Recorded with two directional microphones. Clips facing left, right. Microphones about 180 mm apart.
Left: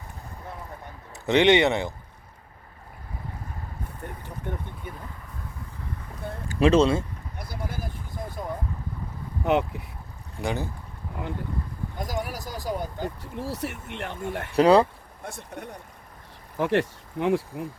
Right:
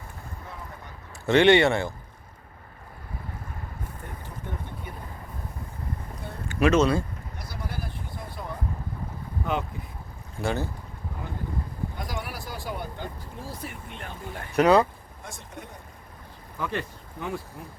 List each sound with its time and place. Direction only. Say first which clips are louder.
1.2 s speech: right 1 dB; 20° left (ahead or behind)
6.5 s speech: left 2 dB; 30° left (ahead or behind)
7.3 s a sound: left 2 dB; 50° left (ahead or behind)
9.4 s speech: left 6 dB; 70° left (ahead or behind)
10.4 s speech: right 1 dB; 15° left (ahead or behind)
11.9 s vehicle: left 4 dB; 40° left (ahead or behind)
13.3 s speech: left 6 dB; 75° left (ahead or behind)
14.5 s speech: left 2 dB; 30° left (ahead or behind)
15.2 s speech: left 4 dB; 60° left (ahead or behind)
16.6 s speech: left 8 dB; 80° left